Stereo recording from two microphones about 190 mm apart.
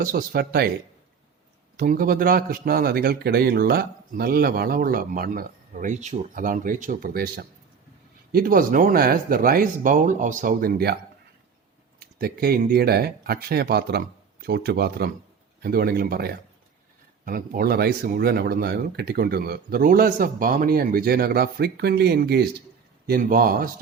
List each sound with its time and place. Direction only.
0.0 s a man's voice: 50° right (ahead or behind)
1.7 s a man's voice: 50° right (ahead or behind)
11.9 s a man's voice: 55° right (ahead or behind)